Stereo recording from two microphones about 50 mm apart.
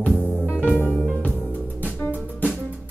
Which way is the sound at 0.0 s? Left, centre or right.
Left.